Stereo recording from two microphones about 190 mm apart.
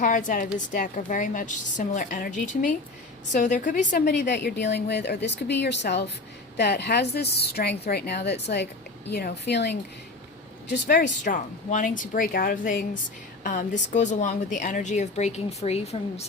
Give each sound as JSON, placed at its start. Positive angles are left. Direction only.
{"t": 0.0, "sound": "a woman's voice", "side_deg": 45}
{"t": 4.0, "sound": "a woman's voice", "side_deg": 60}
{"t": 11.2, "sound": "a woman's voice", "side_deg": 45}